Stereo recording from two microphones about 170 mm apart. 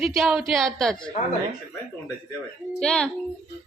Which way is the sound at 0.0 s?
Centre (ahead or behind).